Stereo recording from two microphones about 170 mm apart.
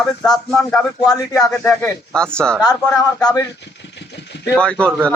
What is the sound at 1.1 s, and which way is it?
Speech, 20° left (ahead or behind).